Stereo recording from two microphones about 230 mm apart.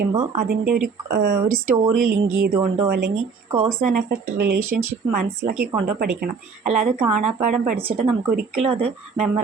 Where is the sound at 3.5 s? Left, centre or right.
Right.